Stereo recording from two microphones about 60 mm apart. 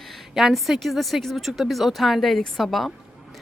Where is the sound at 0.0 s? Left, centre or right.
Centre.